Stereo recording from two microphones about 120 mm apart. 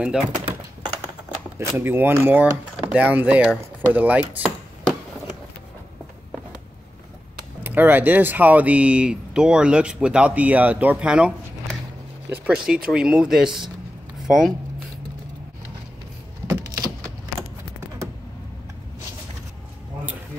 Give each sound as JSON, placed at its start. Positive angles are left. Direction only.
{"t": 0.0, "sound": "speech", "side_deg": -10}
{"t": 1.8, "sound": "speech", "side_deg": -20}
{"t": 7.6, "sound": "speech", "side_deg": -15}
{"t": 16.4, "sound": "power windows", "side_deg": -20}